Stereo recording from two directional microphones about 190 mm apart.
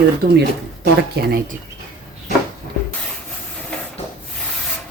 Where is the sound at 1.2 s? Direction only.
55° right (ahead or behind).